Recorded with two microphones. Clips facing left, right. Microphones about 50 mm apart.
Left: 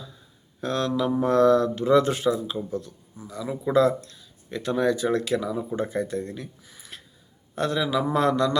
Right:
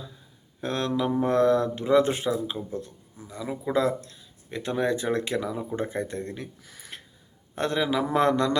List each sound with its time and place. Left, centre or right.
0.6 s speech: right
3.5 s speech: centre; by 6.5 s right
6.6 s a sound: right
7.5 s speech: right